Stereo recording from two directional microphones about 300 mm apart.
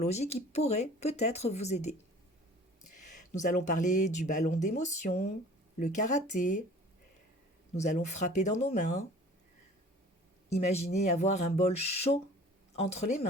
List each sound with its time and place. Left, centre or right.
0.0 s speech: left
3.0 s speech: left
7.8 s speech: left
10.8 s speech: left